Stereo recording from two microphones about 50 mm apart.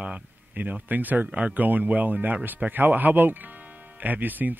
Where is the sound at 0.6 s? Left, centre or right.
Right.